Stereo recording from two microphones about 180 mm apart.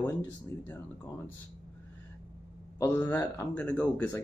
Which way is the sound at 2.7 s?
10° left (ahead or behind).